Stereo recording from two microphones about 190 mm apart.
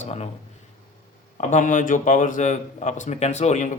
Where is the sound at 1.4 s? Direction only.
40° left (ahead or behind).